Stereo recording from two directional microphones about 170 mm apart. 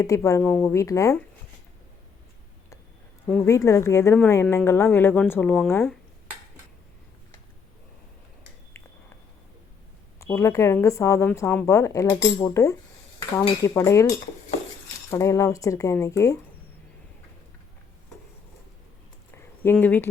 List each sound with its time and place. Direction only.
0.3 s a woman's voice: 15° left (ahead or behind)
3.2 s a woman's voice: 15° left (ahead or behind)
10.2 s a woman's voice: 15° left (ahead or behind)
15.1 s speech: 15° left (ahead or behind)
19.6 s a woman's voice: 10° left (ahead or behind)